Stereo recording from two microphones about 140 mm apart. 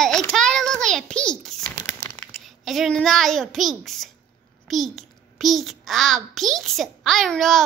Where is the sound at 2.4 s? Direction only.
Centre (ahead or behind).